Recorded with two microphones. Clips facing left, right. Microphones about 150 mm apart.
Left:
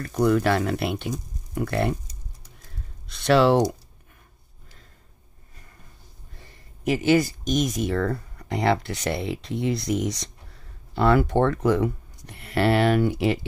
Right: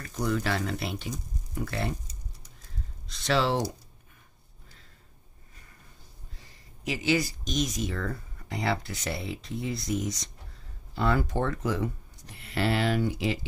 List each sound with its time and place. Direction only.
0.1 s speech: 60° left (ahead or behind)
3.1 s speech: 60° left (ahead or behind)
6.4 s speech: 55° left (ahead or behind)